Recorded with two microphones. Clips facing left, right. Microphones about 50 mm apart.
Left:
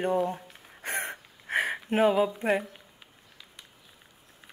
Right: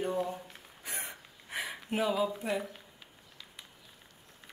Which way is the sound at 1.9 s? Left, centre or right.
Left.